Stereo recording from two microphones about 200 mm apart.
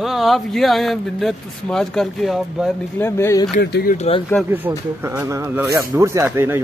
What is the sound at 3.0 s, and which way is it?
Speech, 15° left (ahead or behind).